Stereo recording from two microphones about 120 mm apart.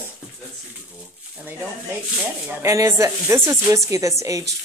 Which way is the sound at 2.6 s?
25° right (ahead or behind).